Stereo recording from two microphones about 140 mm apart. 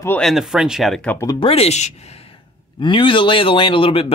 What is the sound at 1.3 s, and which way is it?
Speech, 40° left (ahead or behind).